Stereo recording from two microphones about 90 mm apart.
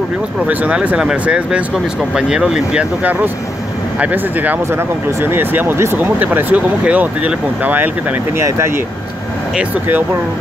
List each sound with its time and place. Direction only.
0.5 s speech: 15° right (ahead or behind)
8.4 s speech: 30° right (ahead or behind)
9.6 s speech: 20° right (ahead or behind)